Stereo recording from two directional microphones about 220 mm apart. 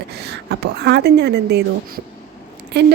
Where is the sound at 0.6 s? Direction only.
50° right (ahead or behind).